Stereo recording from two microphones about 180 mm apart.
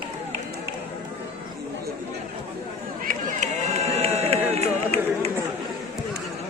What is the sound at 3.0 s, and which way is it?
Run, 45° right (ahead or behind).